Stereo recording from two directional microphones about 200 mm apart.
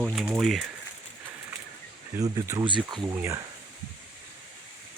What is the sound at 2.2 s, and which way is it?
Speech, 15° right (ahead or behind).